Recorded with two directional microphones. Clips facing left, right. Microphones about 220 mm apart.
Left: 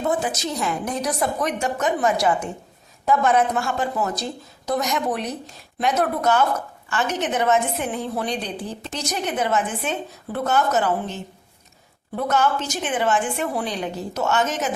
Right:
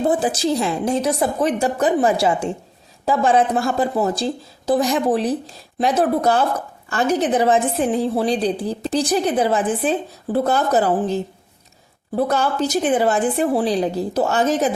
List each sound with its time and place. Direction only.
0.0 s a woman's voice: 30° right (ahead or behind)